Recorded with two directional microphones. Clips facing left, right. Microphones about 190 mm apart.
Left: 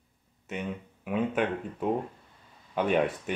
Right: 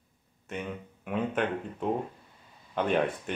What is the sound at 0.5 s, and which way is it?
Speech, centre (ahead or behind).